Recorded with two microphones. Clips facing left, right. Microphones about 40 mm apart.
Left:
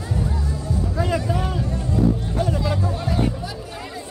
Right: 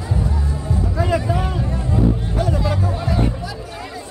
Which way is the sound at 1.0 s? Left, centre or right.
Right.